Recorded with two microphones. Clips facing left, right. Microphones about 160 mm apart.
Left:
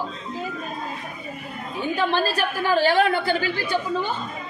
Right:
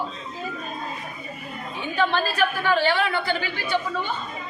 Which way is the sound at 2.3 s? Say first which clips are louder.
Even; 40° left (ahead or behind).